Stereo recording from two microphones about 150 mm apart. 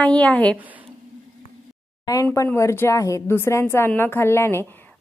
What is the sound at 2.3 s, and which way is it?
A woman's voice, 20° left (ahead or behind).